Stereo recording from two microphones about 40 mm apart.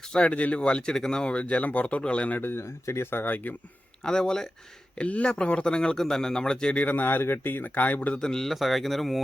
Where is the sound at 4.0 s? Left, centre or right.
Centre.